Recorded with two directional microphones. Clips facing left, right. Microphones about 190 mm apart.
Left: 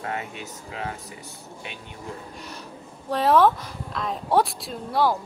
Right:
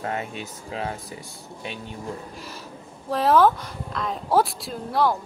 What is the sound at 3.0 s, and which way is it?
Speech, centre (ahead or behind).